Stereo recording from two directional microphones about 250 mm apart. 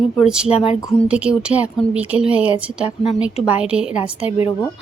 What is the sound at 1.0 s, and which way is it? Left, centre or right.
Speech, centre.